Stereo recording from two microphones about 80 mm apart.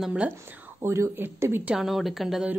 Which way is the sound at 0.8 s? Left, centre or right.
Right.